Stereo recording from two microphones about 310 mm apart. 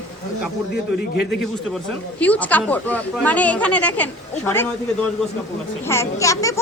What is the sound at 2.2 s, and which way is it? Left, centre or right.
Speech, centre.